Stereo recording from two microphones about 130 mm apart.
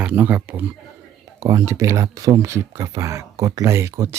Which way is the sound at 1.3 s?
25° right (ahead or behind).